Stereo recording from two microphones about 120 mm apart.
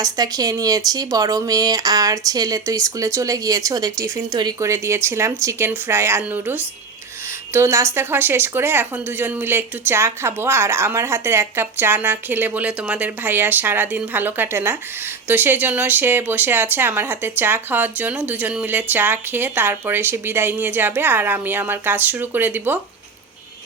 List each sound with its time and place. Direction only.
0.0 s speech: 30° right (ahead or behind); by 22.8 s 15° right (ahead or behind)